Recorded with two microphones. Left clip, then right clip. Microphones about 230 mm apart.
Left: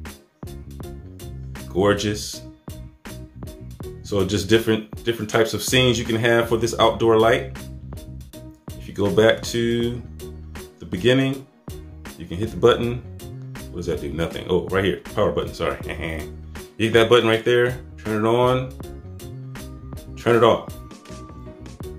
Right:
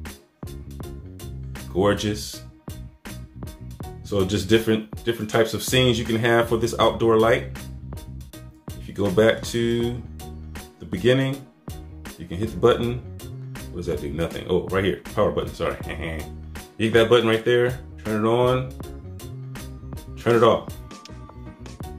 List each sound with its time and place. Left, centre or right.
0.0 s music: centre
1.8 s speech: centre
8.6 s music: centre
12.2 s speech: centre
20.2 s speech: centre